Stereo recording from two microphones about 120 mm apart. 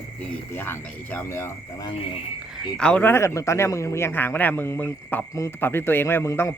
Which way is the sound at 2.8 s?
10° left (ahead or behind).